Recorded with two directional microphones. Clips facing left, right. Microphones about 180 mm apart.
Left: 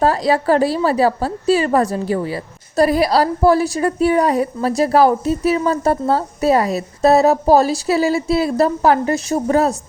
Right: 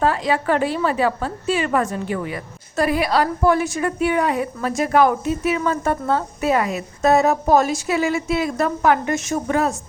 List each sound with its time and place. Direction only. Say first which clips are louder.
0.0 s a woman's voice: left 4 dB; 35° left (ahead or behind)